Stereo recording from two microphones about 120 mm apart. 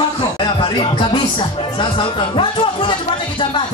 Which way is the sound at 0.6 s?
45° left (ahead or behind).